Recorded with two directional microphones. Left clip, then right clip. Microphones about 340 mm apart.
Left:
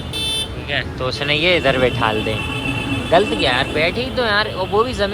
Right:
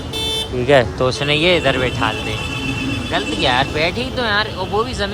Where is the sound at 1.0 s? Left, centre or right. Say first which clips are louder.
Right 2 dB; centre.